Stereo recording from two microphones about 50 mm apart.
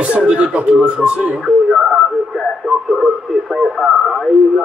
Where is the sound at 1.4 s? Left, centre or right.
Centre.